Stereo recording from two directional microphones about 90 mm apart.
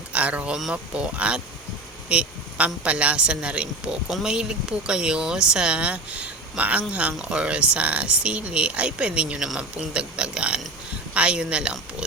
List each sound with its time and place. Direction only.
0.1 s speech: 15° right (ahead or behind)